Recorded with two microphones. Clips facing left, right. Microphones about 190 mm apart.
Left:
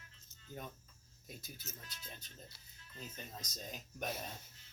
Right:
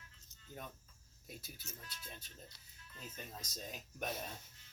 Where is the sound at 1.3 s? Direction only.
5° right (ahead or behind).